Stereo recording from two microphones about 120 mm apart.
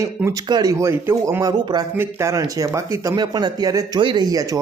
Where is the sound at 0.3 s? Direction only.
35° right (ahead or behind).